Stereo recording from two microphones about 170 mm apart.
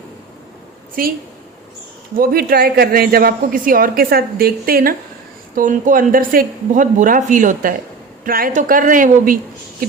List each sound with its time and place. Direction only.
1.0 s a woman's voice: 60° right (ahead or behind)
2.1 s a woman's voice: 60° right (ahead or behind)
5.5 s speech: 50° right (ahead or behind)